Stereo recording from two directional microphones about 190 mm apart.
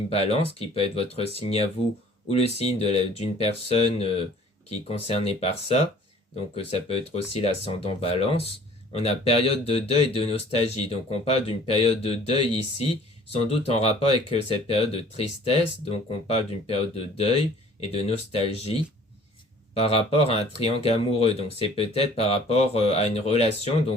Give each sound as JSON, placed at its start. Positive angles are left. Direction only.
{"t": 0.1, "sound": "speech", "side_deg": 30}